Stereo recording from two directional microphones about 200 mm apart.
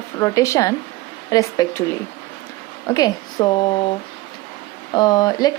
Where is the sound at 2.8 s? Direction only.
20° left (ahead or behind).